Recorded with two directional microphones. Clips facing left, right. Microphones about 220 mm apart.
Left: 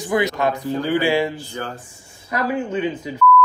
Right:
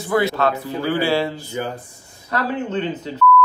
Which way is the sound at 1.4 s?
15° right (ahead or behind).